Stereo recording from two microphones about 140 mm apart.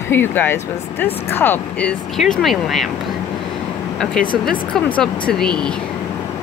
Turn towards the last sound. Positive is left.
turn(degrees=5)  # may be behind; listen again after turning